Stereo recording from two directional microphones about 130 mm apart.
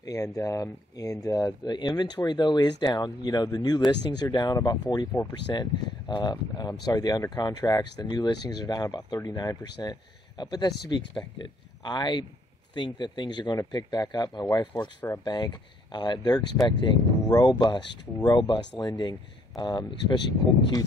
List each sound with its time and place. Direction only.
0.0 s speech: 25° left (ahead or behind)